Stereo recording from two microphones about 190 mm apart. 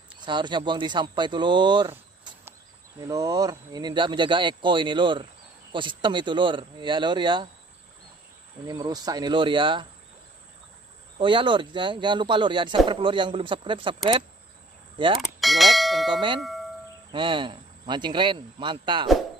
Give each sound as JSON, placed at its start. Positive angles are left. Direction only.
{"t": 0.2, "sound": "speech", "side_deg": -25}
{"t": 8.6, "sound": "speech", "side_deg": -20}
{"t": 11.1, "sound": "speech", "side_deg": -25}
{"t": 15.1, "sound": "bell", "side_deg": 0}
{"t": 16.3, "sound": "tubular bells", "side_deg": 0}
{"t": 17.1, "sound": "speech", "side_deg": -25}